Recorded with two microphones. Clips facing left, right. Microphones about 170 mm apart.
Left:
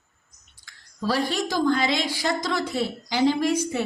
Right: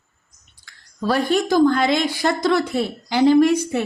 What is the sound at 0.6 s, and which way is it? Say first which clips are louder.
A woman's voice: right 4 dB; 55° right (ahead or behind).